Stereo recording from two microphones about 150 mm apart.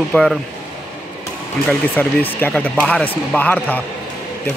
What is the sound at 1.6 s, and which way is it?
Speech, 10° left (ahead or behind).